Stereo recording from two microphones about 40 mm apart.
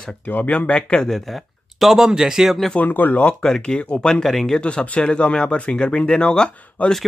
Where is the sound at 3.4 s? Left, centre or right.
Centre.